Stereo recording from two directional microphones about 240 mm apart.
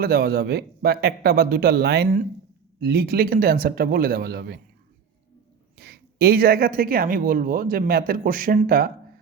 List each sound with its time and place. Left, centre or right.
0.0 s speech: right
5.7 s speech: right